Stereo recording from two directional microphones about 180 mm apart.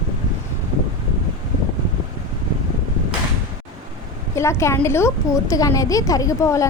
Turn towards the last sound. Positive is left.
turn(degrees=15)  # may be behind; listen again after turning